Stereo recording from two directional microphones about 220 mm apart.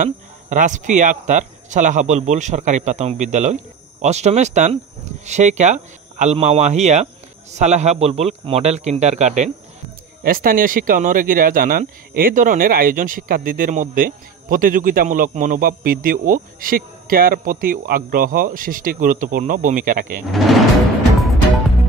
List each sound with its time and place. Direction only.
0.0 s speech: 35° right (ahead or behind)
20.2 s speech: centre (ahead or behind)